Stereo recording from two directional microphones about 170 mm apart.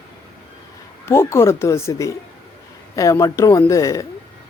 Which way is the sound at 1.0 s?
15° left (ahead or behind).